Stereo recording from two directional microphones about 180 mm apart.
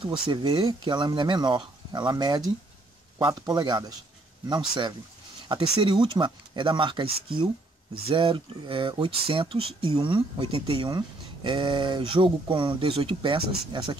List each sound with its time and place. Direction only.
0.3 s speech: 25° right (ahead or behind)